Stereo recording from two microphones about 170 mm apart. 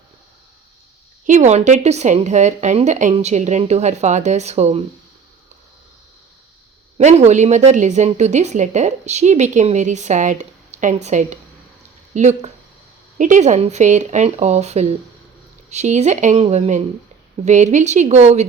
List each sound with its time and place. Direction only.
1.3 s speech: 40° right (ahead or behind)
7.0 s speech: 40° right (ahead or behind)